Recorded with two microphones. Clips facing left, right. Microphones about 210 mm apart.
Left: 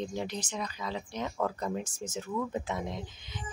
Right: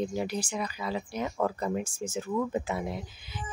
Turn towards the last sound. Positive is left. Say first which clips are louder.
# right 1 dB
turn(degrees=-5)  # may be behind; listen again after turning